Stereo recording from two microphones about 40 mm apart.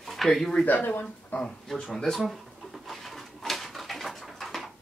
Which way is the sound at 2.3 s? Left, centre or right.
Centre.